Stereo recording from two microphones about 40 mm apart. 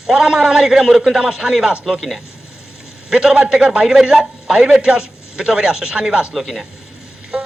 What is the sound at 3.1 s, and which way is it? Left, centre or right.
A man's voice, centre.